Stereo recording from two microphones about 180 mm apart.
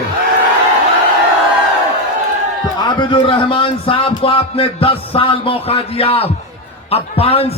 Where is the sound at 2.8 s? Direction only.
25° left (ahead or behind).